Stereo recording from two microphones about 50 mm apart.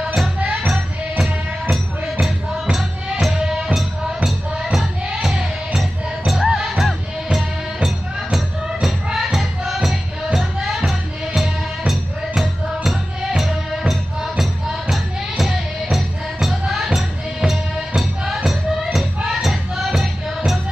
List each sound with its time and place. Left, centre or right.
0.0 s music: centre
0.6 s music: right
1.1 s music: centre